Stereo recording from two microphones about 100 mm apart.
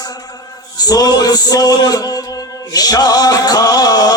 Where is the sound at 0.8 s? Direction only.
40° left (ahead or behind).